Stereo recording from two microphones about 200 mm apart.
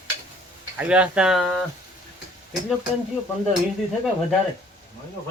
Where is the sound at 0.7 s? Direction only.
5° right (ahead or behind).